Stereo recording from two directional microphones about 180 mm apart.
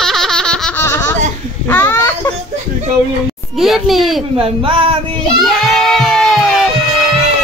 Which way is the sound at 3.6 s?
Centre (ahead or behind).